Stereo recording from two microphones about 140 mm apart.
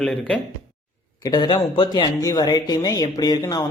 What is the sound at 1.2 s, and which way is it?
Speech, 30° left (ahead or behind).